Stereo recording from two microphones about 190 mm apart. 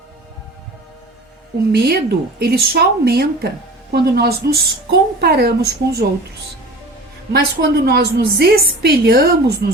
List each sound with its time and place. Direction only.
1.7 s a woman's voice: 55° right (ahead or behind)
7.3 s a woman's voice: 60° right (ahead or behind)